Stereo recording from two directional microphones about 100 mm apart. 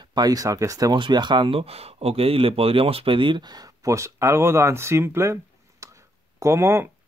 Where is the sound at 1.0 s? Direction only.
45° right (ahead or behind); by 5.3 s 25° right (ahead or behind).